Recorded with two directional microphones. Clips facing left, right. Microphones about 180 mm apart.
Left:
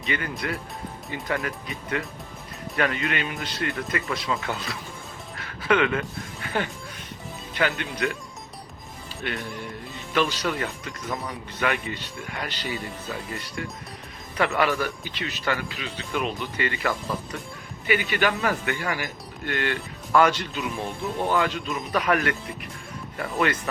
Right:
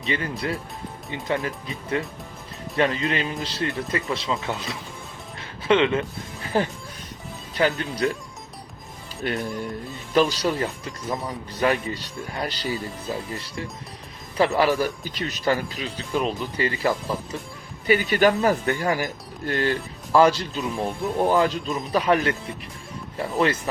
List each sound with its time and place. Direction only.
0.0 s speech: 30° right (ahead or behind)
5.4 s music: 25° right (ahead or behind)
7.5 s speech: 35° right (ahead or behind)
9.2 s speech: 40° right (ahead or behind)
11.1 s speech: 20° right (ahead or behind)
11.6 s speech: 35° right (ahead or behind)